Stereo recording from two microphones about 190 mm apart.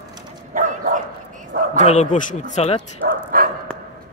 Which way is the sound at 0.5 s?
45° right (ahead or behind).